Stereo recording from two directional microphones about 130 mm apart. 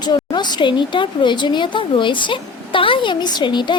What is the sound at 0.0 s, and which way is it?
A woman's voice, 35° left (ahead or behind).